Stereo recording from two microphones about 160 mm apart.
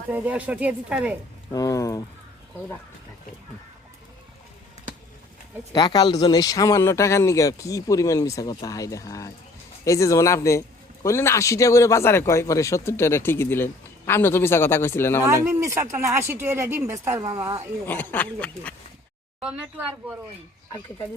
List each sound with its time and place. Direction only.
0.1 s a woman's voice: 10° right (ahead or behind)
1.5 s speech: 20° left (ahead or behind)
5.7 s a man's voice: 25° left (ahead or behind)
15.4 s a woman's voice: 20° right (ahead or behind)
17.8 s a man's voice: 10° left (ahead or behind)